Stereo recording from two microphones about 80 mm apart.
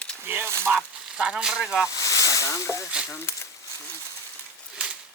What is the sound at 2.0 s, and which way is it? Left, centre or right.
Speech, left.